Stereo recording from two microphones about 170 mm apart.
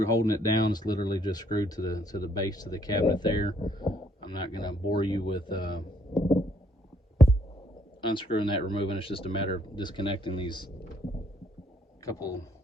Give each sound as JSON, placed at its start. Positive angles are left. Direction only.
{"t": 0.0, "sound": "speech", "side_deg": 20}
{"t": 8.0, "sound": "speech", "side_deg": 30}
{"t": 12.0, "sound": "speech", "side_deg": 20}